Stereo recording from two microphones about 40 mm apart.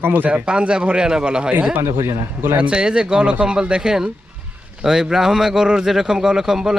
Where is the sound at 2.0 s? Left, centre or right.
Right.